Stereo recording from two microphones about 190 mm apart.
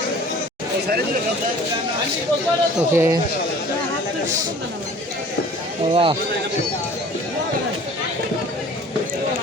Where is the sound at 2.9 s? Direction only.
15° right (ahead or behind).